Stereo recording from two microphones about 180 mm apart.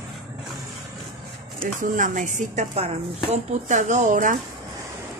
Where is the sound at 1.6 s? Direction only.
45° right (ahead or behind).